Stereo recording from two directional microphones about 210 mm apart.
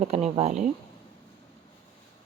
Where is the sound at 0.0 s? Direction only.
30° right (ahead or behind).